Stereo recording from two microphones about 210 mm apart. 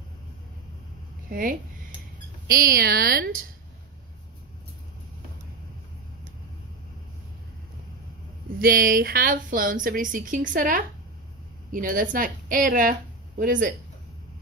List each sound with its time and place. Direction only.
1.3 s a woman's voice: 40° right (ahead or behind)
8.5 s a woman's voice: 45° right (ahead or behind)